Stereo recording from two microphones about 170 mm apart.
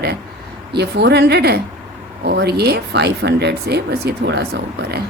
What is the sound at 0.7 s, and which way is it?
Speech, 75° right (ahead or behind).